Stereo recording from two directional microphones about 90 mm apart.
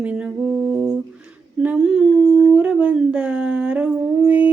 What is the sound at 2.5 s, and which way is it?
Howl, 15° right (ahead or behind).